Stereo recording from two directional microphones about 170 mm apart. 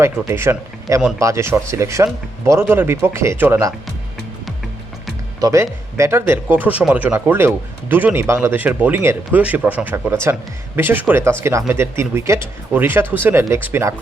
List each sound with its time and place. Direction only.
0.0 s speech: 15° right (ahead or behind)
5.4 s speech: 20° right (ahead or behind)